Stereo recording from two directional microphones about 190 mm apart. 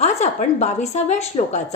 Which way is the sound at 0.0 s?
35° left (ahead or behind).